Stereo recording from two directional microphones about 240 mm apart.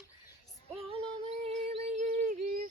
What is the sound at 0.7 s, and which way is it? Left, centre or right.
Female singing, right.